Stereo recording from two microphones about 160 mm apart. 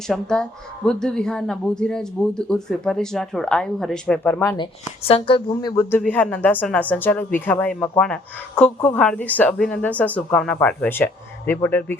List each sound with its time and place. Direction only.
0.1 s a woman's voice: 5° left (ahead or behind)
4.4 s speech: 30° left (ahead or behind)
6.0 s speech: 10° left (ahead or behind)